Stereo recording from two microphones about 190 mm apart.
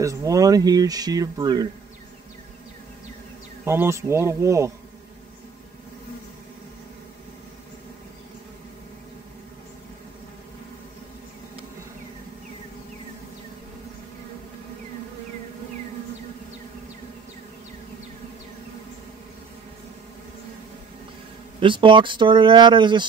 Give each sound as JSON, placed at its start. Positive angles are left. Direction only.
{"t": 0.0, "sound": "speech", "side_deg": -15}
{"t": 3.6, "sound": "speech", "side_deg": -15}
{"t": 21.5, "sound": "speech", "side_deg": -25}